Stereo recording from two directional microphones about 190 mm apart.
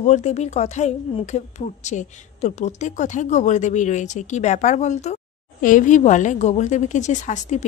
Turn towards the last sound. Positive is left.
turn(degrees=40)  # may be behind; listen again after turning